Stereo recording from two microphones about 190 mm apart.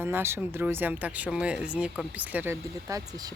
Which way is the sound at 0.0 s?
10° right (ahead or behind).